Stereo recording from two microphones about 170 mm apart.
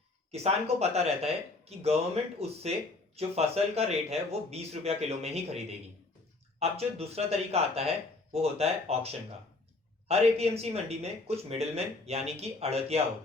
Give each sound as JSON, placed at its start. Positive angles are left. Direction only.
{"t": 0.3, "sound": "speech", "side_deg": -40}
{"t": 10.1, "sound": "speech", "side_deg": -35}